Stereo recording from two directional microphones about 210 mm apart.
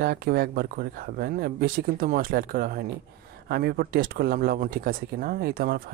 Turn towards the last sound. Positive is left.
turn(degrees=-45)  # may be behind; listen again after turning